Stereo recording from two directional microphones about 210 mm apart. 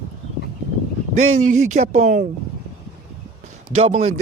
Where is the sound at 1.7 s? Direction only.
35° right (ahead or behind).